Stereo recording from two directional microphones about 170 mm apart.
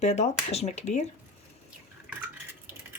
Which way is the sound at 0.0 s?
40° left (ahead or behind).